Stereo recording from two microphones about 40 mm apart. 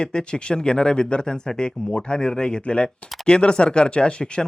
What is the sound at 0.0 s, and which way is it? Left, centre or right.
Speech, left.